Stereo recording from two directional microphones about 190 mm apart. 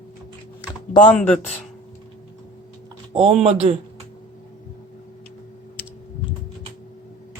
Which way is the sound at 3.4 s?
30° right (ahead or behind).